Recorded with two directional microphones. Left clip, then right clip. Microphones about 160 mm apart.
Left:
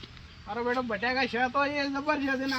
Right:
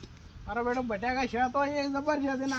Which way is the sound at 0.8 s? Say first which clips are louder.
Left 2 dB; 35° right (ahead or behind).